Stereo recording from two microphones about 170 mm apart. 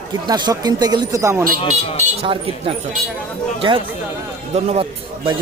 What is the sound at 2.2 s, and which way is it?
Speech, 35° right (ahead or behind).